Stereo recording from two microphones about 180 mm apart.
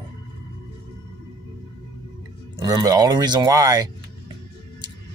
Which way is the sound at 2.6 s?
20° right (ahead or behind).